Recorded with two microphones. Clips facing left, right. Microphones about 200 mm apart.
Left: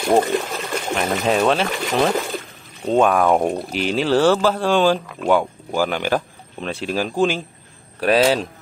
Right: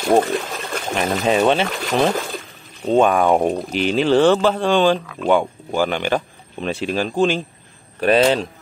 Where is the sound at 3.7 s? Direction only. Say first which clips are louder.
Right 2 dB; centre (ahead or behind).